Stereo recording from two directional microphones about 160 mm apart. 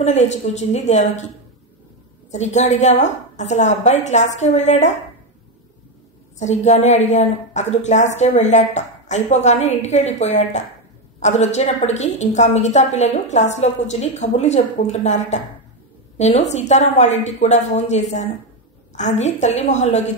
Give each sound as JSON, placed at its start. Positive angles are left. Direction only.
{"t": 0.0, "sound": "a woman's voice", "side_deg": 45}
{"t": 2.3, "sound": "a woman's voice", "side_deg": 45}
{"t": 6.4, "sound": "a woman's voice", "side_deg": 45}